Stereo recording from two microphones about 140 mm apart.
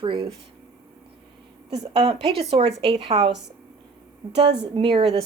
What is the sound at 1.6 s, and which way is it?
A woman's voice, 45° right (ahead or behind).